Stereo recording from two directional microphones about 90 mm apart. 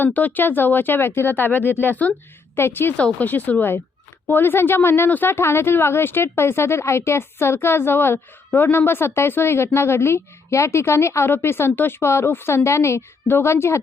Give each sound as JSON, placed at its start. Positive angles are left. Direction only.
{"t": 0.0, "sound": "speech", "side_deg": 20}